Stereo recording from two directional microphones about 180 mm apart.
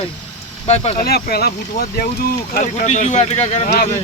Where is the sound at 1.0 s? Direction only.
60° left (ahead or behind); by 3.9 s 40° left (ahead or behind).